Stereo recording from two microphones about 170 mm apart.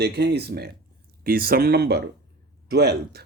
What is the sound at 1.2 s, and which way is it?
Speech, 60° right (ahead or behind).